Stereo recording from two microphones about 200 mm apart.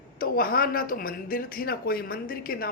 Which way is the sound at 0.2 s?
45° left (ahead or behind).